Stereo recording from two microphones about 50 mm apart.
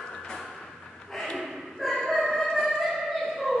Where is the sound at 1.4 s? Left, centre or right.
Centre.